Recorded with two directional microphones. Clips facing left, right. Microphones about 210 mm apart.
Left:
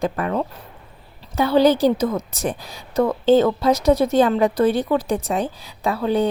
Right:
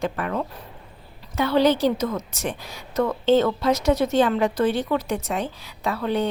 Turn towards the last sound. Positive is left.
turn(degrees=35)  # may be behind; listen again after turning